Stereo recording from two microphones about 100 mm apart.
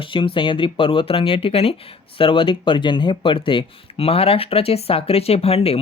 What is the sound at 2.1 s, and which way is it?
Speech, 60° left (ahead or behind).